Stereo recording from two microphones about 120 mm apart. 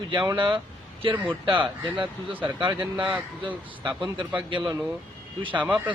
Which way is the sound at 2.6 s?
40° right (ahead or behind).